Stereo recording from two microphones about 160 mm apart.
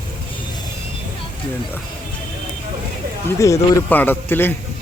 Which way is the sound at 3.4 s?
20° left (ahead or behind).